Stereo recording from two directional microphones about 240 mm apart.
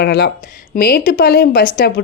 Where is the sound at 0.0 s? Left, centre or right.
Left.